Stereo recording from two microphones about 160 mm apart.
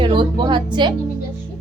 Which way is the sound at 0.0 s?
30° right (ahead or behind).